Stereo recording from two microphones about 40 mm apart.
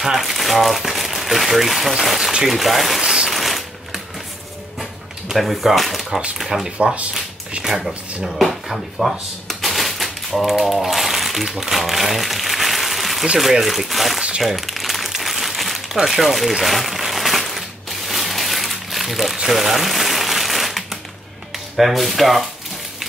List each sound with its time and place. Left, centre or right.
0.0 s speech: centre
3.0 s speech: centre
3.3 s shuffling cards: centre
5.4 s speech: centre
8.2 s a sound: centre
13.5 s speech: centre
14.4 s crumpling: centre
21.7 s speech: centre